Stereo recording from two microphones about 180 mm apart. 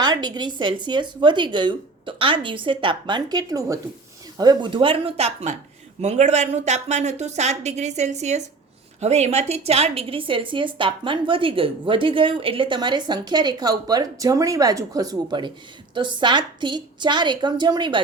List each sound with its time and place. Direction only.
0.0 s a woman's voice: 25° right (ahead or behind)